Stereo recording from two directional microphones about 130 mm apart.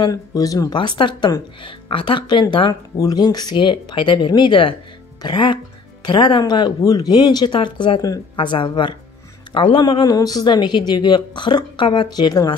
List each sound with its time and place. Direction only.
0.0 s speech: 30° left (ahead or behind)
0.7 s speech: 40° left (ahead or behind)